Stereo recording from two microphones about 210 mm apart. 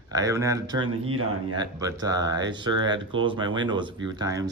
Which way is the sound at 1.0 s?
80° right.